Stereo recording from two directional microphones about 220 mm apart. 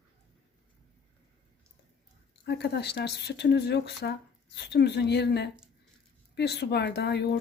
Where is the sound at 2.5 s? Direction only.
50° left (ahead or behind).